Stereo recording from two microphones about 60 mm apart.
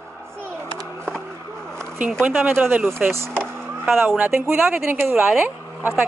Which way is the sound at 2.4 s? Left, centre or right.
Right.